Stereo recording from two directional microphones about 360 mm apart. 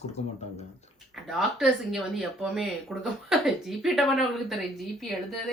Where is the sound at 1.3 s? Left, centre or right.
Centre.